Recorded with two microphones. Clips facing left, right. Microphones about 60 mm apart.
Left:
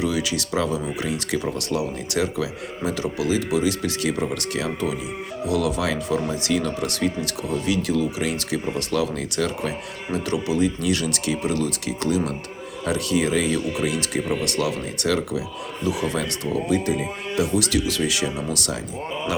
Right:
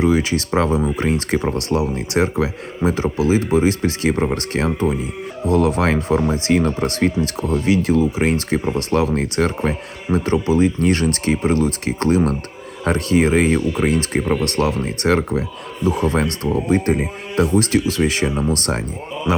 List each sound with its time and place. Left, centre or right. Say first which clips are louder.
0.0 s speech: right 7 dB; right